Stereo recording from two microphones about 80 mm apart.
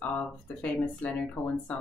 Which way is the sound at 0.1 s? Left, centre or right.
Centre.